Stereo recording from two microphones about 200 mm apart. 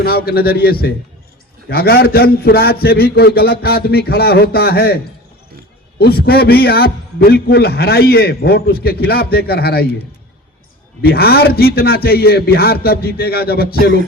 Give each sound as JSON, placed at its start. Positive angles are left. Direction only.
{"t": 0.0, "sound": "a man's voice", "side_deg": 50}
{"t": 6.0, "sound": "a man's voice", "side_deg": 50}
{"t": 11.0, "sound": "a man's voice", "side_deg": 50}